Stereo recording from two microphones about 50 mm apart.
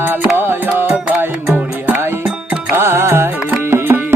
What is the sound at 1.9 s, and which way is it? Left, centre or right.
Music, right.